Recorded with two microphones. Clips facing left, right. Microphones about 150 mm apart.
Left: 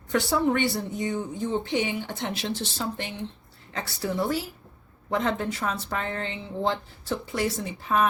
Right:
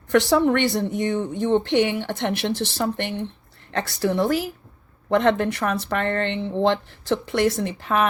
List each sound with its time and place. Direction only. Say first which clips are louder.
0.1 s speech: right 6 dB; 75° right (ahead or behind)
5.0 s speech: right 7 dB; 75° right (ahead or behind)